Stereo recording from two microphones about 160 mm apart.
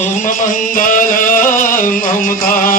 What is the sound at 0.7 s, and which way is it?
Music, 55° left (ahead or behind).